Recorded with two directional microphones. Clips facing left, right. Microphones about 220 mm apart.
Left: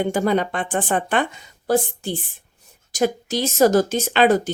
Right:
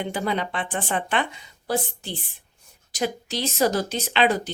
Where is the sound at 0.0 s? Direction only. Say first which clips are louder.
Left 7 dB; 45° left (ahead or behind).